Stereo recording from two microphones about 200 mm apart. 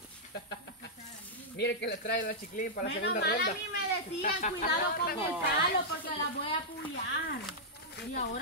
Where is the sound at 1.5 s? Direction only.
60° left (ahead or behind).